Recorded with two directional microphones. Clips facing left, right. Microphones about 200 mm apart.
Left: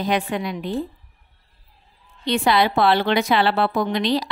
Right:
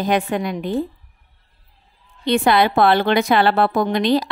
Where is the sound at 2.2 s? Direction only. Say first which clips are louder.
Right 3 dB; 55° right (ahead or behind).